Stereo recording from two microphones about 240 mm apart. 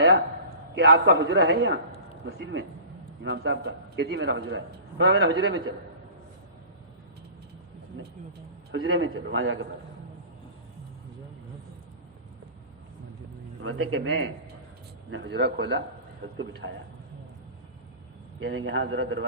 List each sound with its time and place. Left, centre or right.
0.8 s a man's voice: right
8.7 s a man's voice: right
13.6 s a man's voice: right
18.3 s a man's voice: right